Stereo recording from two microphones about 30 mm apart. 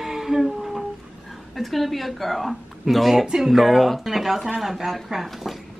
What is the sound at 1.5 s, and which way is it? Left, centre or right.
A woman's voice, centre.